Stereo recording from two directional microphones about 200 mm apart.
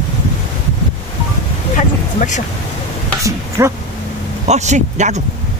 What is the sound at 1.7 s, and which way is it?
Vehicle, 40° left (ahead or behind).